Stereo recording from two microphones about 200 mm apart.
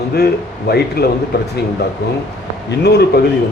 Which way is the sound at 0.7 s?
55° left (ahead or behind).